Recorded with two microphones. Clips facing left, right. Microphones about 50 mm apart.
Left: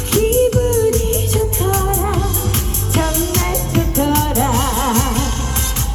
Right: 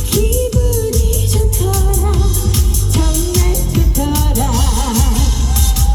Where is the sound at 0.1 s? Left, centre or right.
Left.